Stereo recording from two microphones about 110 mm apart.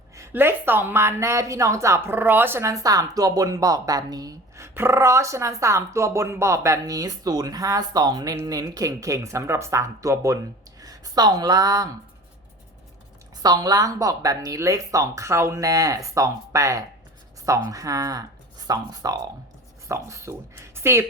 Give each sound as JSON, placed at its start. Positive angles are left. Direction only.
{"t": 0.2, "sound": "speech", "side_deg": -20}
{"t": 13.4, "sound": "speech", "side_deg": -40}